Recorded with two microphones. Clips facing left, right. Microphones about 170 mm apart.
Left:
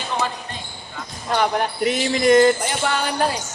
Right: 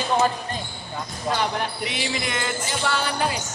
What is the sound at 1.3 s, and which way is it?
Speech, 45° left (ahead or behind).